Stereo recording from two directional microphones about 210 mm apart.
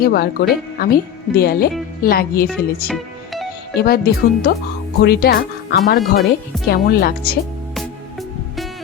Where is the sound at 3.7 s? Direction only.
50° left (ahead or behind).